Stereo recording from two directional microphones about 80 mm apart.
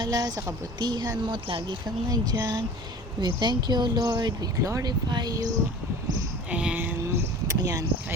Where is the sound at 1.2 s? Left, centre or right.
Right.